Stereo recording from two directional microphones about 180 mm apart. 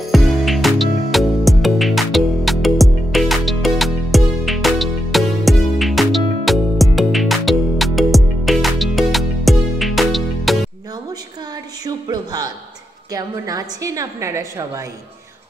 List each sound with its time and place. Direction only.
0.0 s music: centre (ahead or behind)
11.8 s a sound: 20° right (ahead or behind)
13.1 s a woman's voice: 20° right (ahead or behind)